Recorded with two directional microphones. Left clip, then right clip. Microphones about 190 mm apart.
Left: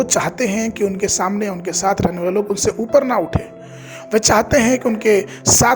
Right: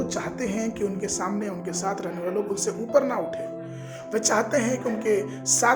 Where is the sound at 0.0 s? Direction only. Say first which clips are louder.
Left 11 dB; 50° left (ahead or behind).